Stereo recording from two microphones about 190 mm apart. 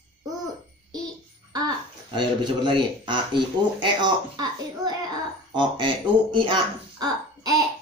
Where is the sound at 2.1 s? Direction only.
25° right (ahead or behind).